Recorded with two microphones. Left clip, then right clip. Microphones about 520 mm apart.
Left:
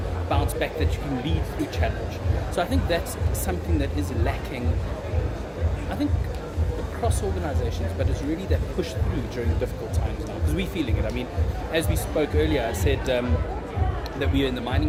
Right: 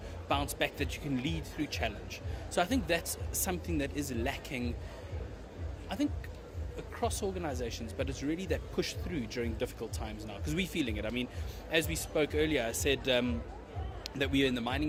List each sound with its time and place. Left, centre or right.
0.3 s speech: right
2.6 s speech: right
6.0 s speech: right
10.6 s speech: right